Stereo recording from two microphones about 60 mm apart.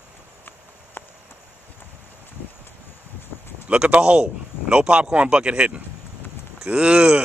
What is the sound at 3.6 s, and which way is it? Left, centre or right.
A man's voice, right.